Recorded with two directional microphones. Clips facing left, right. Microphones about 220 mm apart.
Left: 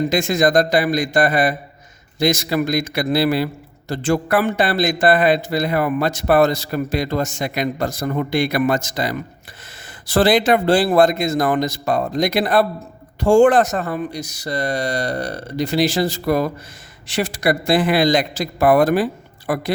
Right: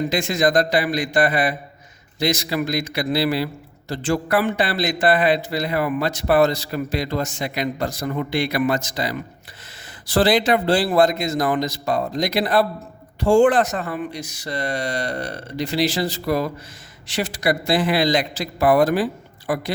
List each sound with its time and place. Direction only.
0.1 s a man's voice: 45° left (ahead or behind)